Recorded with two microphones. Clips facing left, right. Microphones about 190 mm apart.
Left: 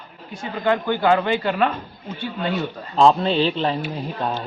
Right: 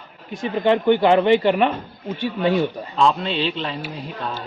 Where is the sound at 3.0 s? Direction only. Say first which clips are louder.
Left 4 dB; 35° left (ahead or behind).